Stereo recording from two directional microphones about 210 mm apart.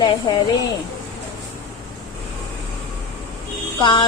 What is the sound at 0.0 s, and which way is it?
Speech, 20° left (ahead or behind).